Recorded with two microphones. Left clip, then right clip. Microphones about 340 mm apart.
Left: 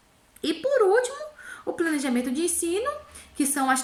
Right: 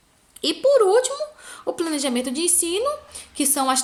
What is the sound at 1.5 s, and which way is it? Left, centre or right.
A woman's voice, centre.